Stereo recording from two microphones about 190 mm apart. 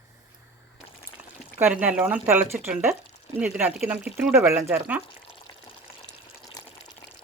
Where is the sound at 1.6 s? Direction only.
10° right (ahead or behind).